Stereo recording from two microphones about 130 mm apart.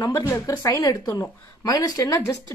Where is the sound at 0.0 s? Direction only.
25° left (ahead or behind).